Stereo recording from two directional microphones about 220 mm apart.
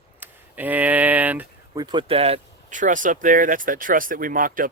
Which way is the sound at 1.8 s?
20° right (ahead or behind).